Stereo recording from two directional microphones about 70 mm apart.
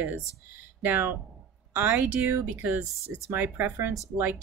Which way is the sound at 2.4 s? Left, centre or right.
Right.